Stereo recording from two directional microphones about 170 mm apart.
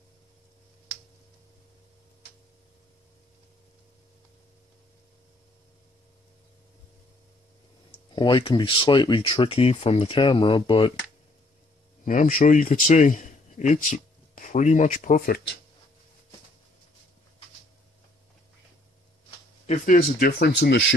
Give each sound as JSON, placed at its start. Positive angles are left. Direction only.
{"t": 8.1, "sound": "speech", "side_deg": 25}
{"t": 12.0, "sound": "a man's voice", "side_deg": 50}
{"t": 19.6, "sound": "speech", "side_deg": 45}
{"t": 20.0, "sound": "speech", "side_deg": 60}